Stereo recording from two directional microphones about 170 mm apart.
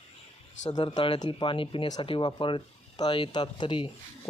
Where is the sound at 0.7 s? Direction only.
25° left (ahead or behind).